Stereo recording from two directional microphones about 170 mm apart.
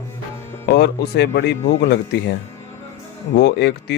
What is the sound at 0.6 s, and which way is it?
Speech, 75° left (ahead or behind).